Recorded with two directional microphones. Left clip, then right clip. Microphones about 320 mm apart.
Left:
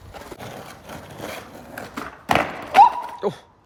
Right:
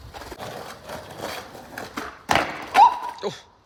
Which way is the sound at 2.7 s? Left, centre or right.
Centre.